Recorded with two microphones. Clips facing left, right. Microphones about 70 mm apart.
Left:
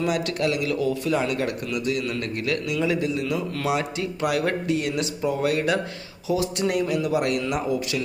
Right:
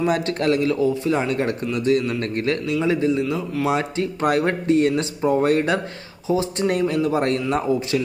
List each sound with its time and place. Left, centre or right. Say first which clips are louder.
0.0 s a man's voice: right 3 dB; right